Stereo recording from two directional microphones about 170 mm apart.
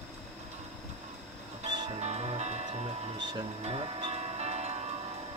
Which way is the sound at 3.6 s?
35° right (ahead or behind).